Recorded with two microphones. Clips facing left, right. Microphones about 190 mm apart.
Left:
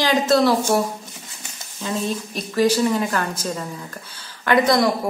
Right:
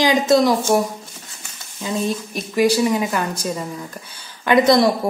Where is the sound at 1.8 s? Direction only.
15° right (ahead or behind).